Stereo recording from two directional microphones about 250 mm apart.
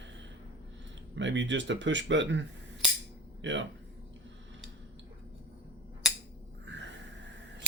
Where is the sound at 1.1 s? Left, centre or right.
Right.